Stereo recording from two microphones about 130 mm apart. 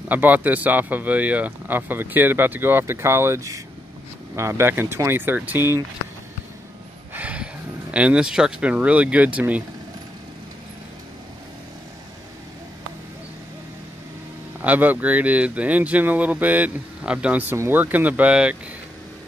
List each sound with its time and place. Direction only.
0.1 s speech: 15° right (ahead or behind)
7.2 s a sound: 10° right (ahead or behind)
7.9 s speech: 10° right (ahead or behind)
14.6 s speech: 10° right (ahead or behind)